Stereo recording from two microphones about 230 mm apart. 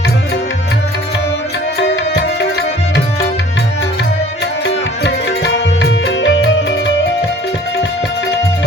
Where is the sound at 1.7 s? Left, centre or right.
Left.